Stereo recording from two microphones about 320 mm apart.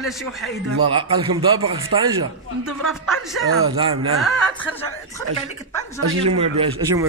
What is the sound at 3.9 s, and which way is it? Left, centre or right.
Speech, right.